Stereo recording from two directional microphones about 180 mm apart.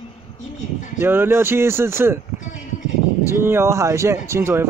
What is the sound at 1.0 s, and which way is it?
Speech, 10° right (ahead or behind).